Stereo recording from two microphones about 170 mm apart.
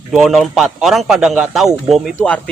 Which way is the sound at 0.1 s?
Centre (ahead or behind).